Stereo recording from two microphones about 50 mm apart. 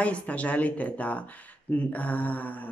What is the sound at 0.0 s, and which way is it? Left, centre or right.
Speech, left.